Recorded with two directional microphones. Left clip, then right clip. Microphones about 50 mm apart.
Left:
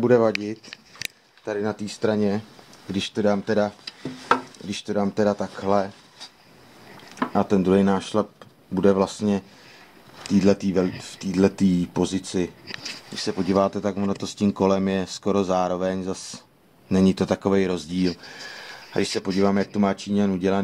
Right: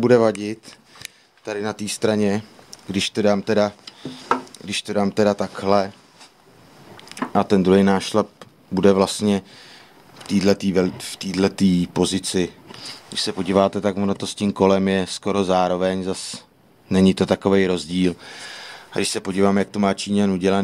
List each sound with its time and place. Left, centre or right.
0.0 s speech: right
7.3 s speech: right
19.2 s speech: right